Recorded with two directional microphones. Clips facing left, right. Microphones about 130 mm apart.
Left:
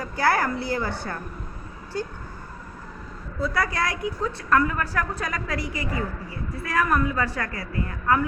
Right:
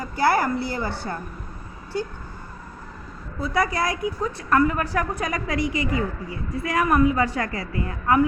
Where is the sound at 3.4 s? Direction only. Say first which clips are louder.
Right 2 dB; 15° right (ahead or behind).